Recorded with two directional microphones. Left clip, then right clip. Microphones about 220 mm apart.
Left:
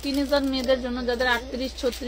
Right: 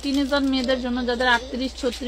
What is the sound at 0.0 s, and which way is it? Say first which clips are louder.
A woman's voice: right 1 dB; 25° right (ahead or behind).